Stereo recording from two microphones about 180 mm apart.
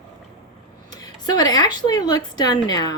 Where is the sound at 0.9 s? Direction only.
20° left (ahead or behind).